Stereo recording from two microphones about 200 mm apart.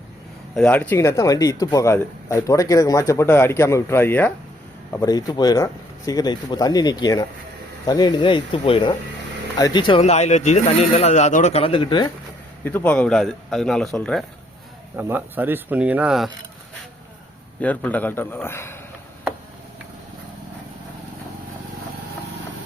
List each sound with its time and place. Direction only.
0.5 s speech: 5° left (ahead or behind); by 12.1 s 25° left (ahead or behind)
12.6 s speech: 10° left (ahead or behind)
14.9 s speech: 10° right (ahead or behind)
17.6 s speech: 5° left (ahead or behind)